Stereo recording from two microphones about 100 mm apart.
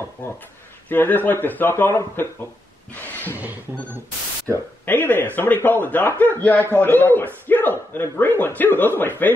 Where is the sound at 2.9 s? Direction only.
20° left (ahead or behind).